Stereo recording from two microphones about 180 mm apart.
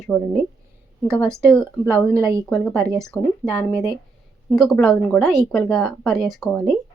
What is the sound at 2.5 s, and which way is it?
A woman's voice, centre (ahead or behind).